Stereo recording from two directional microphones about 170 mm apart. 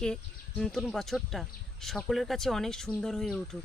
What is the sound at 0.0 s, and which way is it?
Speech, 5° left (ahead or behind).